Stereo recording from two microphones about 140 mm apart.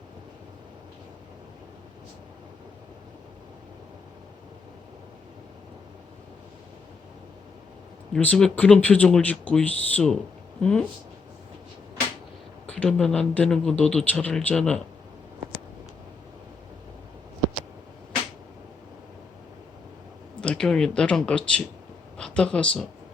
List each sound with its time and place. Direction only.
8.1 s speech: 5° left (ahead or behind)
12.6 s speech: 10° left (ahead or behind)
20.4 s speech: 5° left (ahead or behind)